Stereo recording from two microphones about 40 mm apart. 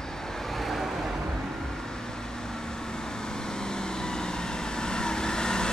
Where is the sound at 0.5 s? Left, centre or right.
Centre.